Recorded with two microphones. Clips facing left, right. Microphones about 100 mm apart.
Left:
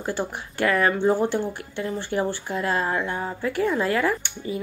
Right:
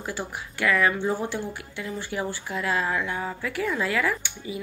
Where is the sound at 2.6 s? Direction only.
35° left (ahead or behind).